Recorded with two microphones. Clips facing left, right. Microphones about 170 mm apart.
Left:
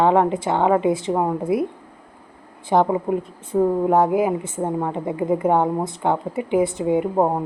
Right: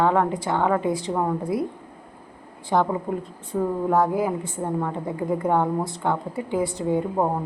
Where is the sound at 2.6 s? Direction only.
20° left (ahead or behind).